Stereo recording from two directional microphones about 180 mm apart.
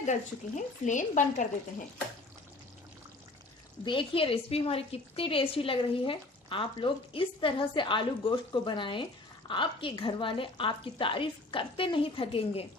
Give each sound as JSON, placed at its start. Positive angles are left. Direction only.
{"t": 0.0, "sound": "speech", "side_deg": 40}
{"t": 3.8, "sound": "a woman's voice", "side_deg": 30}